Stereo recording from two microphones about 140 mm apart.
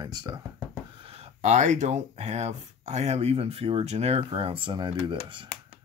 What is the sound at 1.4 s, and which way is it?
Speech, 55° right (ahead or behind).